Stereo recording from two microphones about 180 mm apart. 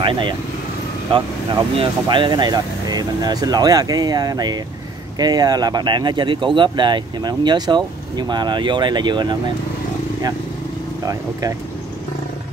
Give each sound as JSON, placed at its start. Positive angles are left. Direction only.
{"t": 0.0, "sound": "speech", "side_deg": -25}